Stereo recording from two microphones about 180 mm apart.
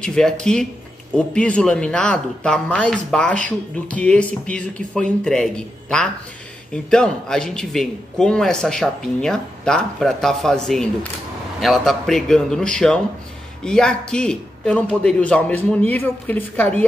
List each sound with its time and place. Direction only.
0.0 s speech: 5° left (ahead or behind)